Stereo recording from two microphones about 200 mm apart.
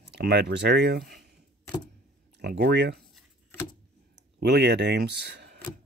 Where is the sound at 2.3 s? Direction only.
55° right (ahead or behind).